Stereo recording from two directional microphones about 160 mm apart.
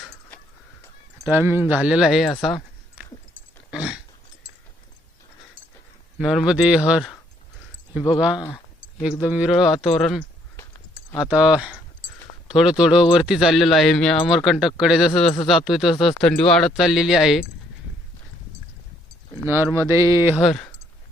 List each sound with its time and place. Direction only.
1.3 s speech: 15° right (ahead or behind)
2.4 s a sound: centre (ahead or behind)
6.1 s speech: 5° right (ahead or behind)
8.2 s speech: 5° right (ahead or behind)
9.7 s speech: centre (ahead or behind)
19.5 s speech: 15° right (ahead or behind)
20.4 s speech: centre (ahead or behind)